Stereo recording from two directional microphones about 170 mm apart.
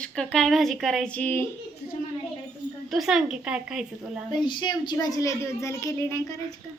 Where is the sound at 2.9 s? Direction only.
Centre (ahead or behind).